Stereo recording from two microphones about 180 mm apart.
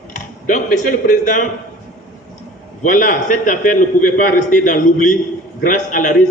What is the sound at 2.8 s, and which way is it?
A man's voice, 45° left (ahead or behind).